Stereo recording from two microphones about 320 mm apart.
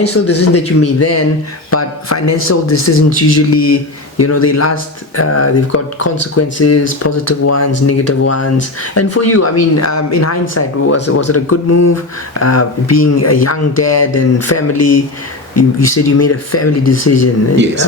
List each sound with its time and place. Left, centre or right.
0.1 s a man's voice: left
3.1 s speech: left